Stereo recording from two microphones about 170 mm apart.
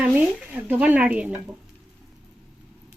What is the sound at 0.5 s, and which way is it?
Speech, 10° right (ahead or behind).